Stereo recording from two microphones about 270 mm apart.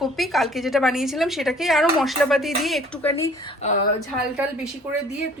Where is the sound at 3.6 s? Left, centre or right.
Left.